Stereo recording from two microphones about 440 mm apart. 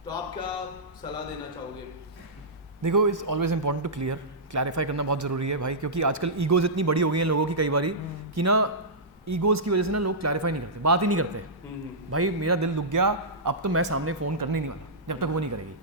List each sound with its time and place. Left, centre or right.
2.8 s a man's voice: right
13.7 s a man's voice: right
14.3 s a man's voice: right